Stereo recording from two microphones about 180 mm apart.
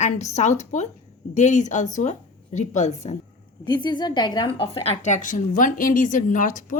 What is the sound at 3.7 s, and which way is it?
A woman's voice, 25° left (ahead or behind).